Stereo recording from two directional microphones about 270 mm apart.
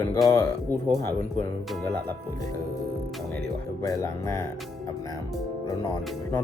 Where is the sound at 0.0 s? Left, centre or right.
Centre.